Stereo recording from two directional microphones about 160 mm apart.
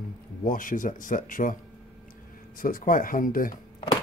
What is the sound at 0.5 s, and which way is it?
Speech, 60° left (ahead or behind).